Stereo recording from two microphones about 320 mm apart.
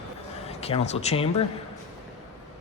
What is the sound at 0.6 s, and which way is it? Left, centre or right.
Speech, centre.